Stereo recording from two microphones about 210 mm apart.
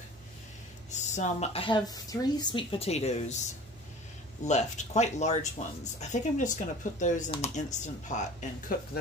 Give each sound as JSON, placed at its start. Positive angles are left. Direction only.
{"t": 0.9, "sound": "speech", "side_deg": 35}
{"t": 4.5, "sound": "speech", "side_deg": 35}